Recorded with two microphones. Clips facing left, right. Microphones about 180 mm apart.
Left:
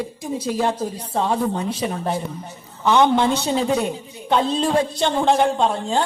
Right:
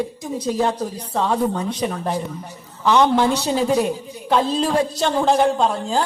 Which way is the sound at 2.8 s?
Centre (ahead or behind).